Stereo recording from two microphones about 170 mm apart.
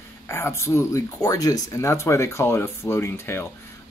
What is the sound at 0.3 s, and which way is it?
Speech, 15° left (ahead or behind).